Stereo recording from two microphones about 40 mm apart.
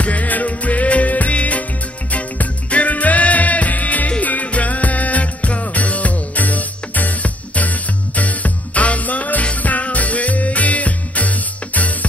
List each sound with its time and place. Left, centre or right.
0.0 s music: left